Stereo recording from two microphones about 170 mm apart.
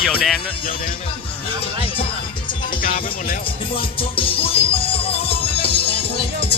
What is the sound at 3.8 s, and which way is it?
Music, 30° left (ahead or behind).